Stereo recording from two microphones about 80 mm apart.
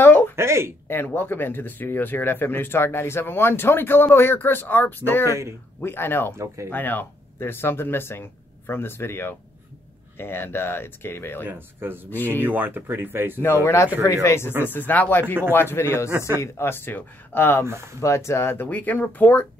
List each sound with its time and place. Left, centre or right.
0.0 s a sound: left
0.4 s speech: right
0.8 s speech: left
5.2 s speech: right
5.8 s speech: left
6.3 s speech: right
6.7 s speech: left
11.4 s speech: right
13.4 s speech: left
14.7 s speech: left
16.1 s speech: right
16.3 s speech: left
18.0 s speech: left